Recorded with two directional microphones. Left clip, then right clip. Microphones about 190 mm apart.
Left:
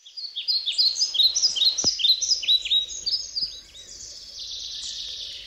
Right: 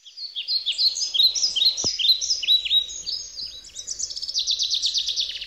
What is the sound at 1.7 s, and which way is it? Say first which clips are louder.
Bird vocalization: even; 10° right (ahead or behind).